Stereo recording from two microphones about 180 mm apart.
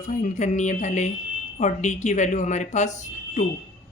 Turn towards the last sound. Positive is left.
turn(degrees=40)  # may be behind; listen again after turning